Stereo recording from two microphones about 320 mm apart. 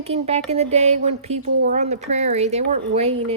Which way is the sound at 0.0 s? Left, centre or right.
Centre.